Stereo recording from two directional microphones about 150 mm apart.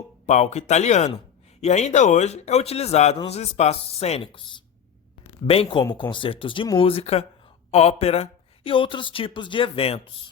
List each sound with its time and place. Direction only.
0.3 s speech: 50° left (ahead or behind)
5.5 s speech: 35° left (ahead or behind)